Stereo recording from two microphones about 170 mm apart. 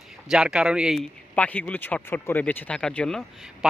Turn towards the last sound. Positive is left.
turn(degrees=0)  # may be behind; listen again after turning